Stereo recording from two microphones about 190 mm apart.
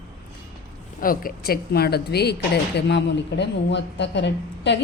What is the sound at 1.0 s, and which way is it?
Speech, 50° left (ahead or behind).